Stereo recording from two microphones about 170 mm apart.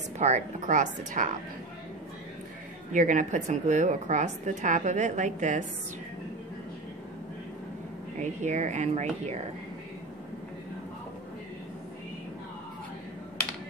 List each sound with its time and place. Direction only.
0.2 s a woman's voice: 45° right (ahead or behind)
2.9 s a woman's voice: 50° right (ahead or behind)
8.2 s a woman's voice: 45° right (ahead or behind)